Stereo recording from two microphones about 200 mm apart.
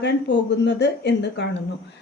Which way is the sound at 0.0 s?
60° left (ahead or behind).